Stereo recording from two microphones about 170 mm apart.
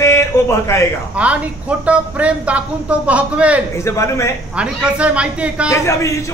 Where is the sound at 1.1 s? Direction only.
10° right (ahead or behind).